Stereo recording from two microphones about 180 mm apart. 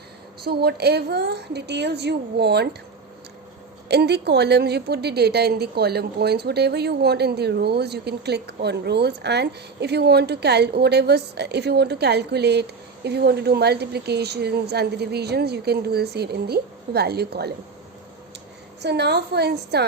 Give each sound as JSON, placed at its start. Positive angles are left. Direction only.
{"t": 0.4, "sound": "a woman's voice", "side_deg": -60}
{"t": 3.8, "sound": "a woman's voice", "side_deg": -65}
{"t": 18.8, "sound": "a woman's voice", "side_deg": -65}